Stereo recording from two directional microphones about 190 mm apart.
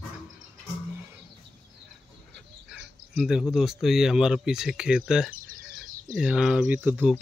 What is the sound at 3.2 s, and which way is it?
Speech, 5° right (ahead or behind).